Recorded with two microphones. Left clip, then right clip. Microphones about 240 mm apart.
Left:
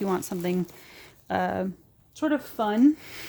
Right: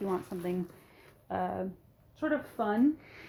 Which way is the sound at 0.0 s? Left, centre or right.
Left.